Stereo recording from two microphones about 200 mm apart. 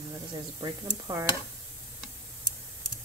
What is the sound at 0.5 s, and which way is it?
Speech, 20° right (ahead or behind).